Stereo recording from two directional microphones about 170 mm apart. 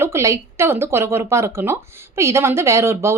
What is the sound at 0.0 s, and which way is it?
A woman's voice, 15° right (ahead or behind).